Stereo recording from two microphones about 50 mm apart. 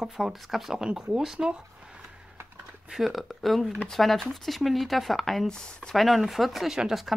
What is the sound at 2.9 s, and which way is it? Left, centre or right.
Speech, centre.